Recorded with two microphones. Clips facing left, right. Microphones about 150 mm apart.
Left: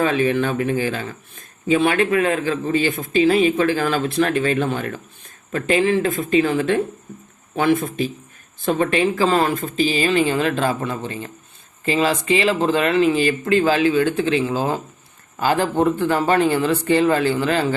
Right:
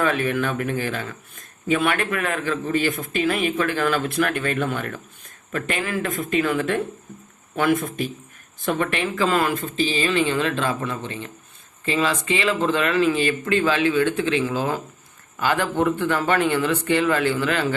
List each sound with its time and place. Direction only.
0.0 s a man's voice: 30° left (ahead or behind)